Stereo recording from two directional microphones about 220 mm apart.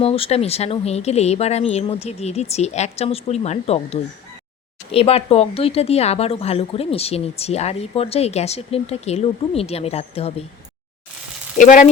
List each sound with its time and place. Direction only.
0.0 s speech: 25° left (ahead or behind)
11.5 s speech: 35° left (ahead or behind)